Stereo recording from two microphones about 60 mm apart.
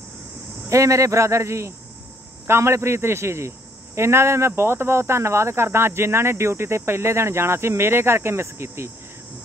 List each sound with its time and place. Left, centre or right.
0.7 s a man's voice: right